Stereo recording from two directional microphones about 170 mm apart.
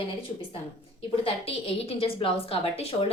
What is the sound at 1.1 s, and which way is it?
A woman's voice, 35° left (ahead or behind).